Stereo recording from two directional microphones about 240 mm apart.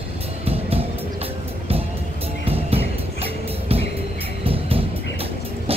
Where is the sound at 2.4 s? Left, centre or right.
Right.